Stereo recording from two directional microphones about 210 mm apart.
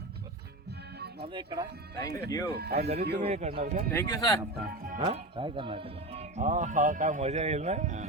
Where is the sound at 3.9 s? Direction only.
15° left (ahead or behind).